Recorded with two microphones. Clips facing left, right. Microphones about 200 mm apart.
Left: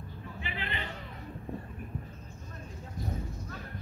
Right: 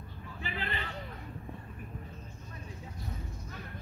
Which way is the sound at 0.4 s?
40° right (ahead or behind).